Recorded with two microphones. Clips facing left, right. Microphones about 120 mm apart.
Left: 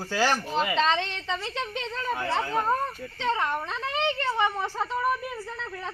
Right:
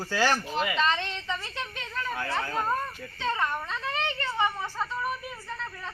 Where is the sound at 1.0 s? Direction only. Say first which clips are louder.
Left 2 dB; 90° left.